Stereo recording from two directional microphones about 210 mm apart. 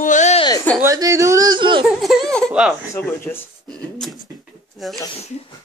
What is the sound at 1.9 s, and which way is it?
Speech, centre (ahead or behind).